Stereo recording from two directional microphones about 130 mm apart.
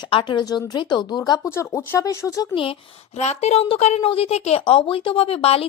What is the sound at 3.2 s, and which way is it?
A woman's voice, 60° left (ahead or behind).